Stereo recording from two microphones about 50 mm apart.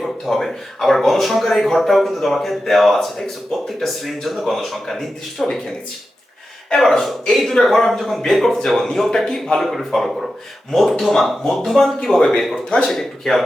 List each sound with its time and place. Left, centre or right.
0.0 s speech: centre
6.7 s speech: centre